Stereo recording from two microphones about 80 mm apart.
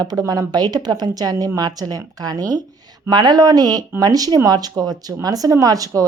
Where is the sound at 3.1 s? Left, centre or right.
Right.